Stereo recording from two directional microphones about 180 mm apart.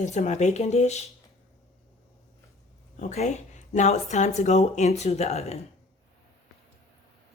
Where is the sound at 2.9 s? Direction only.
40° left (ahead or behind).